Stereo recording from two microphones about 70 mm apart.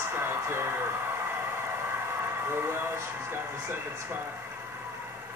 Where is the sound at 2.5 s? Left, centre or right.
Right.